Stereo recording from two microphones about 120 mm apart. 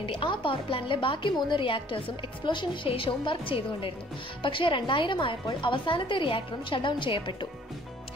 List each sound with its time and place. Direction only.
0.0 s a woman's voice: 45° left (ahead or behind)